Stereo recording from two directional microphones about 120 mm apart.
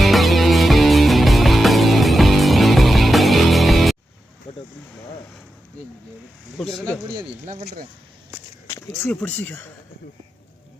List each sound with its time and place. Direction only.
0.0 s music: centre (ahead or behind)
4.5 s vehicle: 50° left (ahead or behind)
6.6 s a sound: 5° left (ahead or behind)
9.0 s speech: 10° left (ahead or behind)